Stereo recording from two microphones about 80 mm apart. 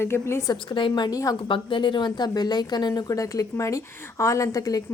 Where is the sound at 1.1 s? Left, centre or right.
Left.